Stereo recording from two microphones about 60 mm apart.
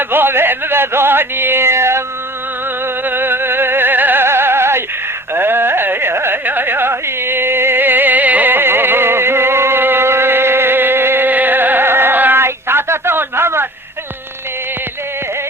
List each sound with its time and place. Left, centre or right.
0.0 s speech: right
2.8 s music: right
5.3 s carnatic music: right